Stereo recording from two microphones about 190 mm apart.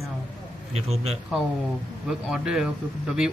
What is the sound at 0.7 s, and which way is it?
Speech, 35° right (ahead or behind).